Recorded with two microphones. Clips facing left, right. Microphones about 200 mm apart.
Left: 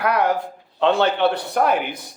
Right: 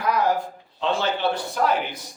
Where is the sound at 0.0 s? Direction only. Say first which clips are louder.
Left 2 dB; 65° left (ahead or behind).